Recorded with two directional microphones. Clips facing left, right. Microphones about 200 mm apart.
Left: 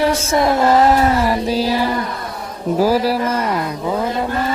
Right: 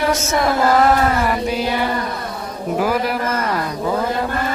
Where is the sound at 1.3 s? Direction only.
35° left (ahead or behind).